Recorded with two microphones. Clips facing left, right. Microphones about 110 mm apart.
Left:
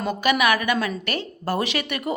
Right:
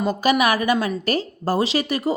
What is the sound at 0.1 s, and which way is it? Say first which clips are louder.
Speech: right 1 dB; 35° right (ahead or behind).